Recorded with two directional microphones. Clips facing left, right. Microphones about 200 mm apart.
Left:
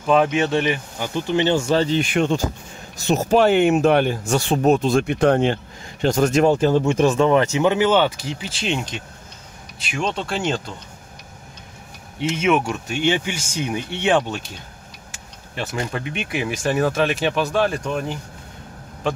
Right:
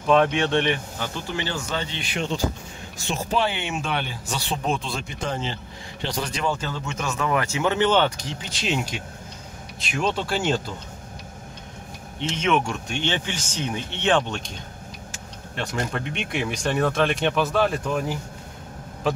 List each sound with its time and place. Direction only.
0.0 s speech: 5° left (ahead or behind)
0.9 s speech: 15° left (ahead or behind); by 5.0 s 45° left (ahead or behind)
5.0 s speech: 65° left (ahead or behind)
6.0 s speech: 45° left (ahead or behind); by 10.6 s 5° right (ahead or behind)
12.2 s speech: 10° left (ahead or behind)
15.5 s speech: 5° left (ahead or behind)